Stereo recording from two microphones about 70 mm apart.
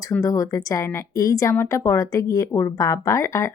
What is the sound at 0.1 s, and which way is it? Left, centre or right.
Speech, left.